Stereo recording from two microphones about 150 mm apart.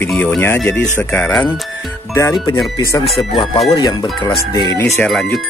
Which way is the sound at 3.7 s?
30° left (ahead or behind).